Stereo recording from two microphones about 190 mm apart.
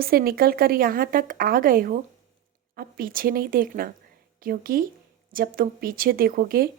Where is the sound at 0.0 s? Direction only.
50° right (ahead or behind).